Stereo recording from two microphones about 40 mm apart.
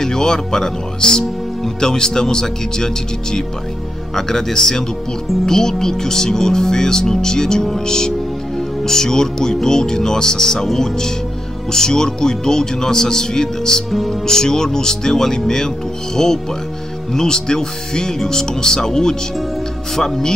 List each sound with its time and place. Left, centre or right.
0.0 s speech: centre